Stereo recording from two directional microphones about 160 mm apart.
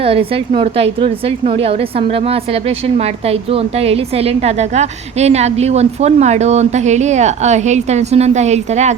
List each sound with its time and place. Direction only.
0.0 s a woman's voice: 35° right (ahead or behind)